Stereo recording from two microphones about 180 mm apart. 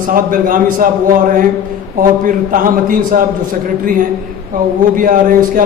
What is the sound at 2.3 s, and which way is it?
Speech, 50° right (ahead or behind).